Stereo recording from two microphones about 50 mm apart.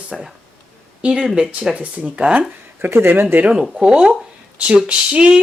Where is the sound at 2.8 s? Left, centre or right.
Right.